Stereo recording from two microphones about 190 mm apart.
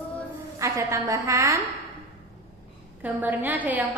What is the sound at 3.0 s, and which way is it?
Speech, 10° right (ahead or behind).